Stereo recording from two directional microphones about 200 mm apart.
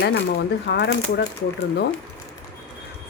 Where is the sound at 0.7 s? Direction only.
60° left (ahead or behind).